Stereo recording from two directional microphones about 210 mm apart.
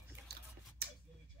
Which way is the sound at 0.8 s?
50° right (ahead or behind).